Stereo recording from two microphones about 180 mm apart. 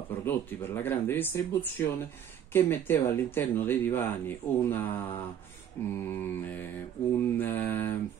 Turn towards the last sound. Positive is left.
turn(degrees=10)  # may be behind; listen again after turning